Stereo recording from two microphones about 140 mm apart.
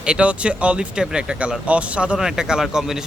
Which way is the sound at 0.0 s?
10° right (ahead or behind).